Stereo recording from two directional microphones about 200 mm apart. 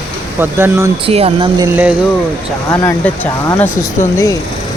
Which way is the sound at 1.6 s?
10° right (ahead or behind).